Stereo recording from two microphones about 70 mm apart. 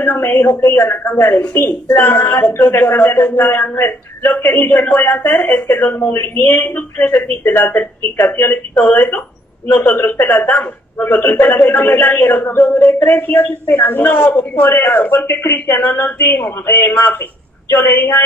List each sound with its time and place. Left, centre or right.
0.0 s a man's voice: left